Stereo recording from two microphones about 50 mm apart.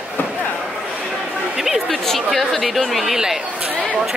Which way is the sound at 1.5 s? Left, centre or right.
Centre.